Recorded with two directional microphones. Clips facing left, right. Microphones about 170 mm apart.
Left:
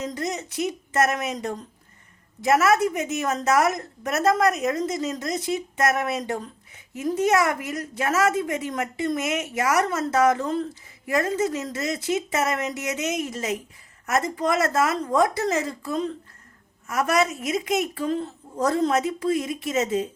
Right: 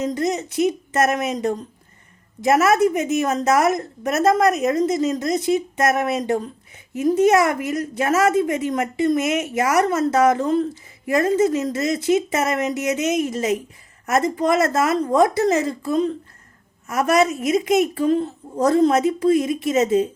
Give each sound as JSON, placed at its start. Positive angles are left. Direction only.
{"t": 0.0, "sound": "a woman's voice", "side_deg": -20}
{"t": 2.4, "sound": "a woman's voice", "side_deg": -20}